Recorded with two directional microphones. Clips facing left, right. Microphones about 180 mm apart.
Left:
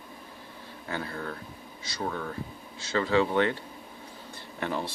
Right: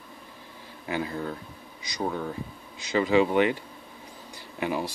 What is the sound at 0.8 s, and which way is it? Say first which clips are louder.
Speech: right 4 dB; 15° right (ahead or behind).